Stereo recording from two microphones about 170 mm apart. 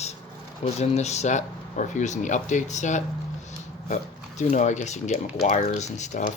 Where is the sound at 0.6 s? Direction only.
40° left (ahead or behind).